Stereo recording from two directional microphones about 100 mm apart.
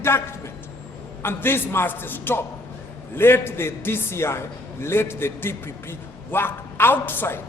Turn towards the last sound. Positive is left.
turn(degrees=20)  # may be behind; listen again after turning